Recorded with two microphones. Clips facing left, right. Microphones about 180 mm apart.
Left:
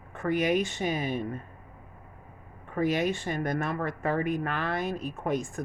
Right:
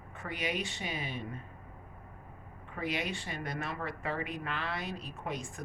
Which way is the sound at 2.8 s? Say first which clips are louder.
Left 9 dB; 45° left (ahead or behind).